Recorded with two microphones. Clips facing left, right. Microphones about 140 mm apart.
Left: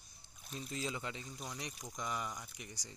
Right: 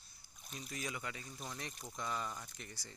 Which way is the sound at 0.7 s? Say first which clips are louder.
Left 3 dB; 25° left (ahead or behind).